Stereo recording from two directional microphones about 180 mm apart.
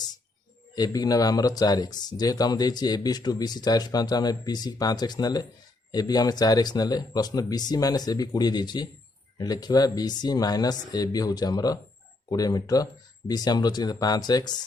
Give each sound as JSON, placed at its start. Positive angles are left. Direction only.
{"t": 0.8, "sound": "speech", "side_deg": 20}